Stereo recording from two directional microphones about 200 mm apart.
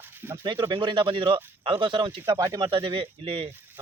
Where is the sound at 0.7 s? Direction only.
25° right (ahead or behind).